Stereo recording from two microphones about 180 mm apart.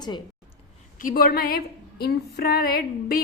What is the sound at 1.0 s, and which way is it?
A woman's voice, 55° left (ahead or behind).